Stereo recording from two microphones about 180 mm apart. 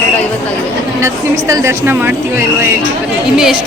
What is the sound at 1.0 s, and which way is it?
A woman's voice, 15° right (ahead or behind).